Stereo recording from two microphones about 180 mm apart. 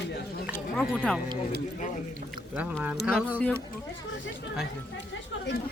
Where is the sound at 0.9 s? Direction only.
5° right (ahead or behind).